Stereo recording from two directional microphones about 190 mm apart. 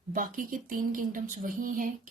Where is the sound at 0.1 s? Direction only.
45° right (ahead or behind).